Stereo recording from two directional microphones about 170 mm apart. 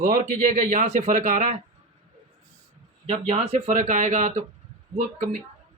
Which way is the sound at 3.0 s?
35° right (ahead or behind).